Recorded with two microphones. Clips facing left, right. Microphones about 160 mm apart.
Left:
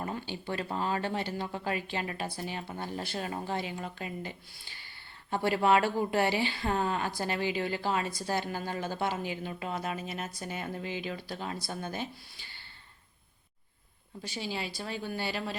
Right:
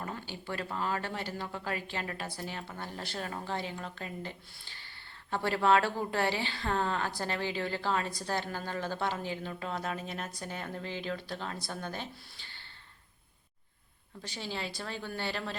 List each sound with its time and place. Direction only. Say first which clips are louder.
0.0 s a woman's voice: left 4 dB; 20° left (ahead or behind)
14.2 s a woman's voice: left 2 dB; 10° left (ahead or behind)